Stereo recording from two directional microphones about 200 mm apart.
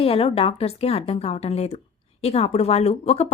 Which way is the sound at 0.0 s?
30° left (ahead or behind).